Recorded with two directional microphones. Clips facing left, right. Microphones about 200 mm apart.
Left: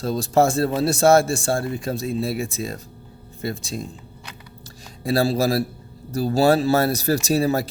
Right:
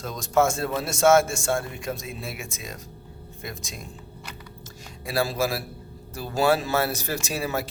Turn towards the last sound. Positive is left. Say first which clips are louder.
# left 8 dB
turn(degrees=35)  # may be behind; listen again after turning